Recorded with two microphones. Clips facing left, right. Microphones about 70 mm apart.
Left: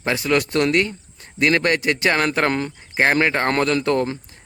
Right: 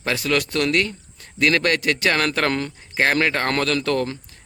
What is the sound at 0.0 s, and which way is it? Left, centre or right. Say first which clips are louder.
Speech: left 2 dB; left.